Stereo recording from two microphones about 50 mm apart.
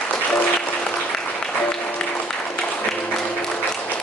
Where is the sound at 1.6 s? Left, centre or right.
Left.